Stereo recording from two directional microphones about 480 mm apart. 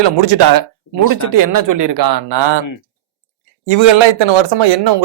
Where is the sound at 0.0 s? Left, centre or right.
Right.